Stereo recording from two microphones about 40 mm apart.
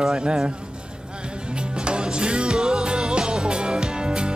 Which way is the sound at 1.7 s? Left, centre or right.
Right.